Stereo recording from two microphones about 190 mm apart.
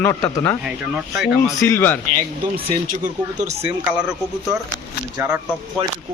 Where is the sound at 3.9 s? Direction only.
5° right (ahead or behind).